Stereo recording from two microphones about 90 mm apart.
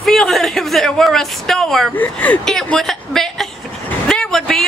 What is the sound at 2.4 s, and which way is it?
A woman's voice, 5° left (ahead or behind).